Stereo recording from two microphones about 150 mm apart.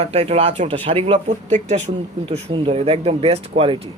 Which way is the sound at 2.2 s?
35° right (ahead or behind).